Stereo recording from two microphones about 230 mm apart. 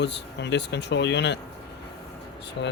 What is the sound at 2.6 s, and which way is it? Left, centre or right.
Speech, left.